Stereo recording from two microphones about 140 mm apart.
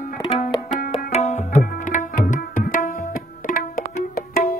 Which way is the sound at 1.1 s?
55° left (ahead or behind).